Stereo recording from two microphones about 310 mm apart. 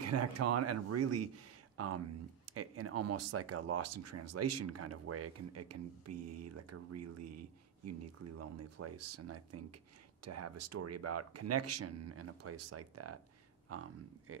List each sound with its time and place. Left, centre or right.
0.0 s speech: right